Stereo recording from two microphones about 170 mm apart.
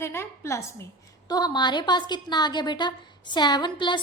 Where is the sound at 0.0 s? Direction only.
15° left (ahead or behind).